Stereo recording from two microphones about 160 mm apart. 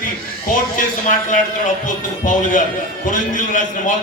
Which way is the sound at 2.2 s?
55° left (ahead or behind).